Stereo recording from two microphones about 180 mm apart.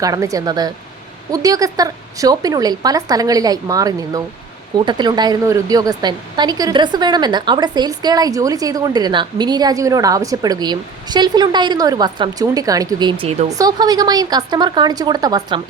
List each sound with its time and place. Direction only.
0.0 s a woman's voice: 20° right (ahead or behind)
13.6 s a woman's voice: 20° right (ahead or behind)